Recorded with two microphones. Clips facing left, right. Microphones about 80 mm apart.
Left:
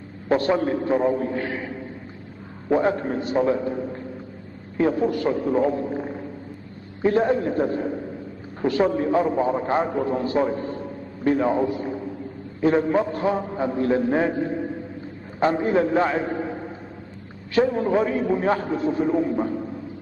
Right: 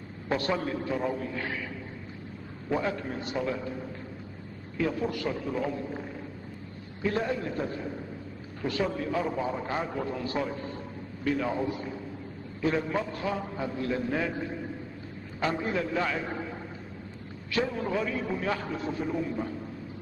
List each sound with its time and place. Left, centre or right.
0.3 s a man's voice: left
11.6 s a sound: left
12.5 s a man's voice: left